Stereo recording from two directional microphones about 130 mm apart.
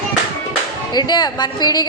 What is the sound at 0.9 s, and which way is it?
Speech, 35° left (ahead or behind).